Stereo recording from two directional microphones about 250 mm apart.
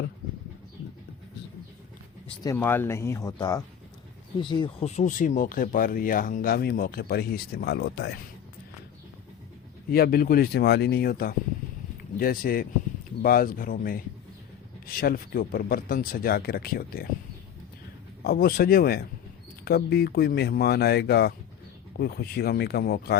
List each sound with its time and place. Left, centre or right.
2.2 s speech: centre; by 8.1 s left
9.9 s speech: left
18.2 s speech: left